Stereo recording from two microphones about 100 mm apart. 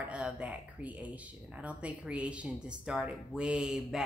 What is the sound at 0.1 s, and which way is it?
Speech, 10° right (ahead or behind).